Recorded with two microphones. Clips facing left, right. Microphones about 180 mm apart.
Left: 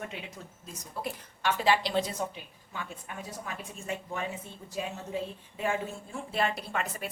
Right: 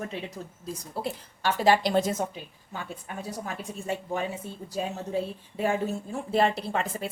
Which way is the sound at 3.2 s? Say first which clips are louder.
Right 6 dB; 35° right (ahead or behind).